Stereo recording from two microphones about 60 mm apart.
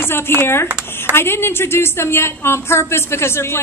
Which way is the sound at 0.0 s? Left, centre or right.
Left.